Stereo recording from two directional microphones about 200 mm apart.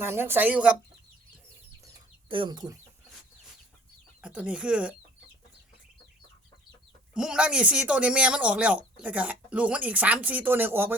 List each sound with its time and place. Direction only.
0.0 s speech: 10° right (ahead or behind)
2.3 s speech: 25° right (ahead or behind)
4.2 s speech: 5° right (ahead or behind)
7.1 s speech: 5° right (ahead or behind)